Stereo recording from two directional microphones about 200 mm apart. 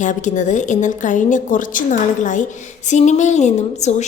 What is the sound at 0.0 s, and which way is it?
A woman's voice, 40° left (ahead or behind).